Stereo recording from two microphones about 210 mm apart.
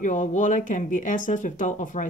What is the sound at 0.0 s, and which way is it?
Speech, 35° left (ahead or behind).